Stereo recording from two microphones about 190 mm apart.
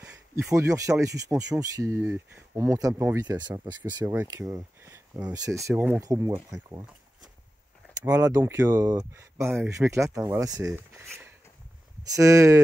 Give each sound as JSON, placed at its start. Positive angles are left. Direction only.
{"t": 0.5, "sound": "speech", "side_deg": -15}
{"t": 8.0, "sound": "speech", "side_deg": -15}
{"t": 10.6, "sound": "speech", "side_deg": -5}
{"t": 12.0, "sound": "speech", "side_deg": -15}